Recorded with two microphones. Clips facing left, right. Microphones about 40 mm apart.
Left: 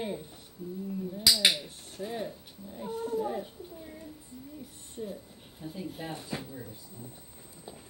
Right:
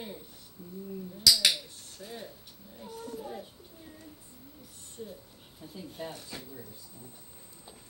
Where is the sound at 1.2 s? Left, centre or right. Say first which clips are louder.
Even; left.